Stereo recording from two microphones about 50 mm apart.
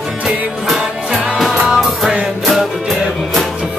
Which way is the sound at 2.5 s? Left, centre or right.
Centre.